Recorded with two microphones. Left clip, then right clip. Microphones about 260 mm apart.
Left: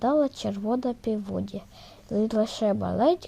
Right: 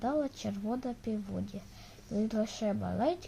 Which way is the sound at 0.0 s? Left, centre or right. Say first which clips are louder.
Left 9 dB; left.